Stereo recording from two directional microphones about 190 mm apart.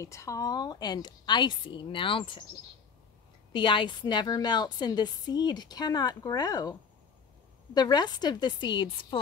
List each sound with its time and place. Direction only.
0.0 s a woman's voice: 15° left (ahead or behind)
3.5 s a woman's voice: 25° left (ahead or behind)